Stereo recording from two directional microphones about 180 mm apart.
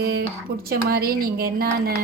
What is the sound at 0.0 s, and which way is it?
Speech, 60° right (ahead or behind).